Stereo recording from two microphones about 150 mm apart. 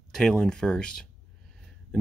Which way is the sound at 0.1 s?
5° left (ahead or behind).